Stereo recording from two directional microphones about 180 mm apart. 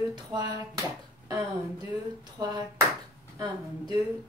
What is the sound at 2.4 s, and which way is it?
Speech, 20° right (ahead or behind).